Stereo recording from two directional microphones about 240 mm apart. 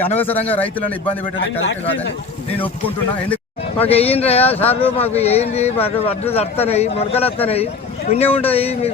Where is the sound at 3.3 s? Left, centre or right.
Left.